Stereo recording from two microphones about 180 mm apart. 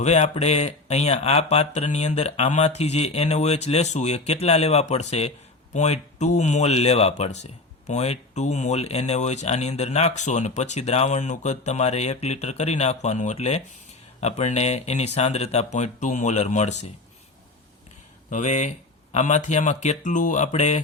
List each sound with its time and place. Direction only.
0.0 s speech: 40° left (ahead or behind)
18.3 s speech: 40° left (ahead or behind)